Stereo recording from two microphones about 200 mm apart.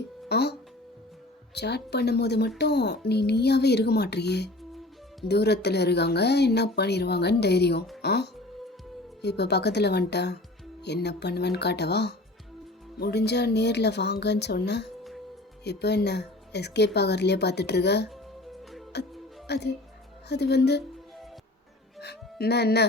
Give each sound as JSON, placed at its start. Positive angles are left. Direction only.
{"t": 0.3, "sound": "speech", "side_deg": 55}
{"t": 1.5, "sound": "speech", "side_deg": 55}
{"t": 22.0, "sound": "speech", "side_deg": 55}